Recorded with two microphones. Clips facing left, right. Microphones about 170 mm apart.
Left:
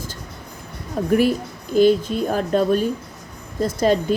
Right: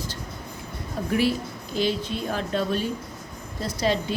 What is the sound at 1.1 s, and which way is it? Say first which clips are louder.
Speech: left 6 dB; 50° left (ahead or behind).